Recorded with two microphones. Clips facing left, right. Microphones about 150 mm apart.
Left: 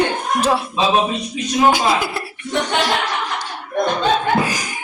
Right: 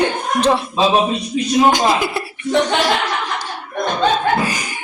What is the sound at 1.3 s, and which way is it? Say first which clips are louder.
Speech: right 5 dB; 40° right (ahead or behind).